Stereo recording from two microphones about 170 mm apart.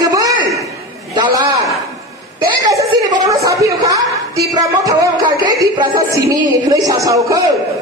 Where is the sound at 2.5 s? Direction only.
20° right (ahead or behind).